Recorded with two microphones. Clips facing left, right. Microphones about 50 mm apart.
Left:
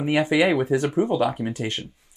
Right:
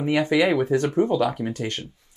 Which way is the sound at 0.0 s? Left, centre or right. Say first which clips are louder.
Even; left.